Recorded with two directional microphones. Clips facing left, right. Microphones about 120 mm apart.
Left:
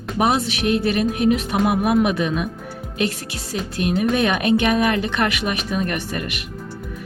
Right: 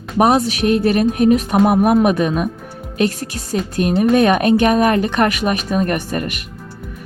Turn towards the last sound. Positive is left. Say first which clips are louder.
# right 5 dB
turn(degrees=-40)  # may be behind; listen again after turning